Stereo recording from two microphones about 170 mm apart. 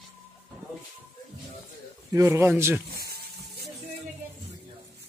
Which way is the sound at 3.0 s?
70° right (ahead or behind).